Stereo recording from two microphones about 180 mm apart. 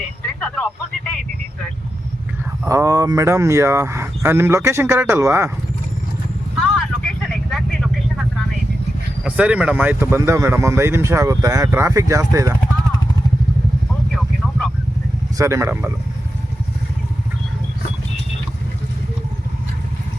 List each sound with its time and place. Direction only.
0.3 s a sound: 5° left (ahead or behind)
2.6 s speech: 15° right (ahead or behind)
6.6 s vehicle: centre (ahead or behind)
9.2 s speech: 5° right (ahead or behind)
15.4 s speech: 15° right (ahead or behind)